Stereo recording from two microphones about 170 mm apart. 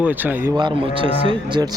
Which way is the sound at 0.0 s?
10° right (ahead or behind).